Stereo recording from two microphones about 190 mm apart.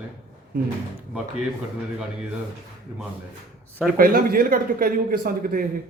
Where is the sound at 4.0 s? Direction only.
50° right (ahead or behind).